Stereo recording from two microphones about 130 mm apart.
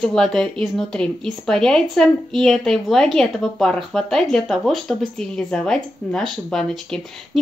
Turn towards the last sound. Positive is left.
turn(degrees=5)  # may be behind; listen again after turning